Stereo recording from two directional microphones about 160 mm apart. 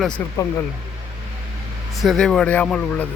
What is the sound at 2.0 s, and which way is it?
Speech, centre (ahead or behind).